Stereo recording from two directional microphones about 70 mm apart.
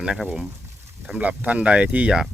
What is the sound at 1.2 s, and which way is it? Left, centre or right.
Speech, right.